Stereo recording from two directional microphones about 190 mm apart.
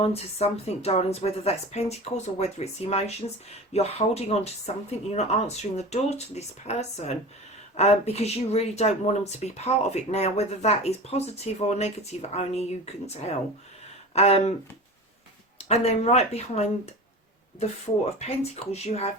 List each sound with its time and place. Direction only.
0.0 s speech: 35° left (ahead or behind)
15.5 s speech: 35° left (ahead or behind)